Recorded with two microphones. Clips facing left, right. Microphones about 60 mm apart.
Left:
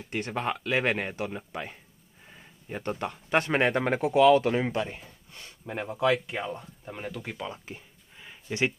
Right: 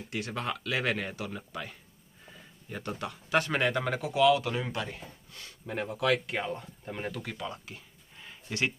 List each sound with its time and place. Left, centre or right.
0.1 s speech: left
6.4 s speech: centre
8.2 s a sound: centre